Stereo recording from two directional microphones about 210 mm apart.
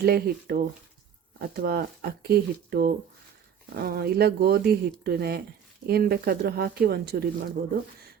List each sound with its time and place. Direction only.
0.0 s speech: 45° right (ahead or behind)